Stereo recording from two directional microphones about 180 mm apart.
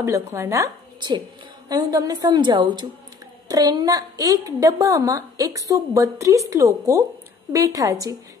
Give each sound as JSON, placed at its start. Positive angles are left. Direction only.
{"t": 0.3, "sound": "a woman's voice", "side_deg": -15}